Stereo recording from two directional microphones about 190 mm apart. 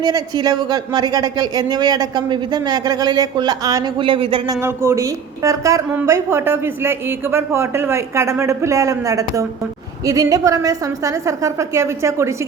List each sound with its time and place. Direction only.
0.0 s speech: 20° right (ahead or behind)
4.6 s a woman's voice: 15° right (ahead or behind)